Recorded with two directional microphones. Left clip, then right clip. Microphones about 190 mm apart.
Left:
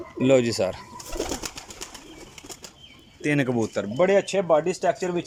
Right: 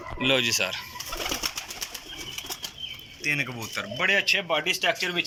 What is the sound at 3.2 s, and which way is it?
Speech, 55° left (ahead or behind).